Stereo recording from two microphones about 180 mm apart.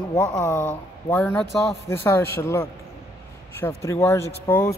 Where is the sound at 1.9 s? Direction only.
15° left (ahead or behind).